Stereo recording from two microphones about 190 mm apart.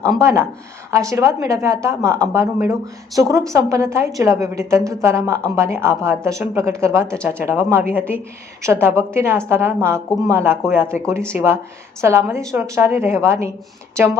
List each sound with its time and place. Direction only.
0.0 s speech: 15° right (ahead or behind)